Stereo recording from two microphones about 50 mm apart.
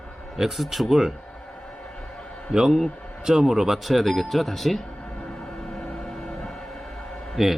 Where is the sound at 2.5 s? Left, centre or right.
Centre.